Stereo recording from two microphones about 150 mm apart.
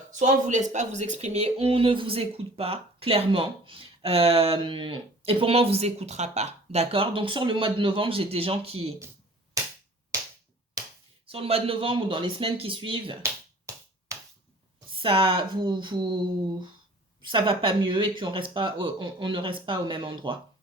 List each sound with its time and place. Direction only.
0.1 s speech: 55° right (ahead or behind)
11.3 s speech: 40° right (ahead or behind)
14.9 s speech: 35° right (ahead or behind)
17.2 s speech: 35° right (ahead or behind)